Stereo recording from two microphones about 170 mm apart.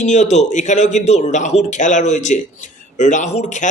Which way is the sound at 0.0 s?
45° left (ahead or behind).